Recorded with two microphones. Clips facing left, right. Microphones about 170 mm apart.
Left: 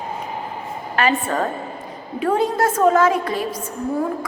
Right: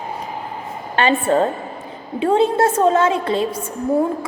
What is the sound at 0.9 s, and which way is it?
A woman's voice, 30° right (ahead or behind).